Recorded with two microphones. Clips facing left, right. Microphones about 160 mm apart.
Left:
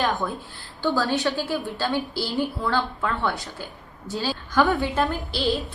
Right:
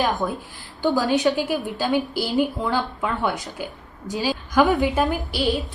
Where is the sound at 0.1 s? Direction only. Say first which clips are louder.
Right 2 dB; 15° right (ahead or behind).